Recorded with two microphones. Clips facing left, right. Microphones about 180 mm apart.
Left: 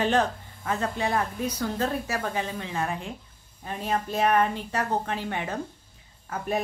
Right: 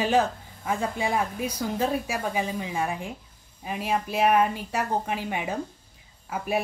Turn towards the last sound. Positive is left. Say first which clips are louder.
# right 1 dB
turn(degrees=-10)  # may be behind; listen again after turning